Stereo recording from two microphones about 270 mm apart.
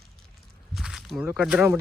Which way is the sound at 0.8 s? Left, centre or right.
Centre.